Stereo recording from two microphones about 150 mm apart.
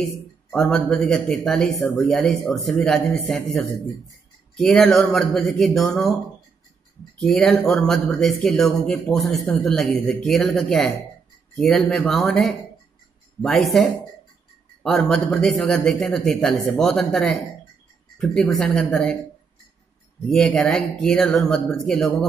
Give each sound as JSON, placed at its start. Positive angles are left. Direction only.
{"t": 0.5, "sound": "a man's voice", "side_deg": 5}
{"t": 7.2, "sound": "a man's voice", "side_deg": 0}
{"t": 20.3, "sound": "a man's voice", "side_deg": 5}